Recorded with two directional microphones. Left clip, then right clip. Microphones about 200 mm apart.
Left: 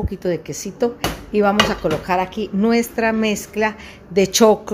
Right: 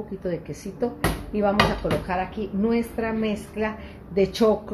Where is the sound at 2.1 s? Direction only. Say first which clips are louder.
Left 7 dB; 60° left (ahead or behind).